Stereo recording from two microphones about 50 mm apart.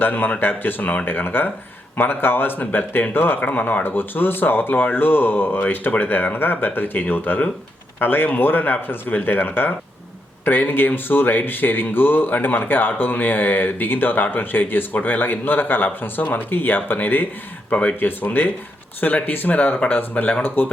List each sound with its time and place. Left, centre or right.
0.0 s speech: left